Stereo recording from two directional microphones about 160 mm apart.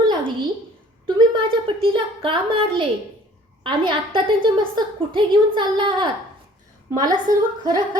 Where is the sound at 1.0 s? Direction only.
30° right (ahead or behind).